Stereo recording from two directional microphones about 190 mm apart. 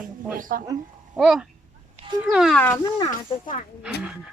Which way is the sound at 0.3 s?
45° right (ahead or behind).